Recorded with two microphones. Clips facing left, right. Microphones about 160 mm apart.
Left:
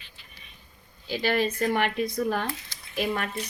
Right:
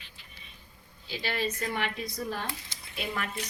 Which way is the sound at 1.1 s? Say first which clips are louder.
Left 7 dB; 55° left (ahead or behind).